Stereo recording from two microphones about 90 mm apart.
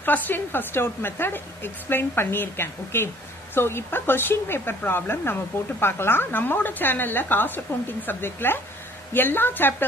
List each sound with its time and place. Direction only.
0.0 s speech: 20° left (ahead or behind)